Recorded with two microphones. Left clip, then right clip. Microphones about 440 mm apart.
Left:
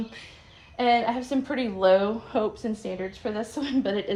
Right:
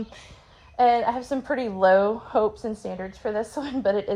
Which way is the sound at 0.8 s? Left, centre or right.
Centre.